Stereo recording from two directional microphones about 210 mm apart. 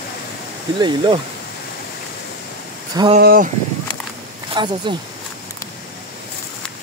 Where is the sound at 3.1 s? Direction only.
45° right (ahead or behind).